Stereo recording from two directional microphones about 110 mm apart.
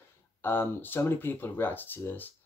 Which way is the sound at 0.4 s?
20° left (ahead or behind).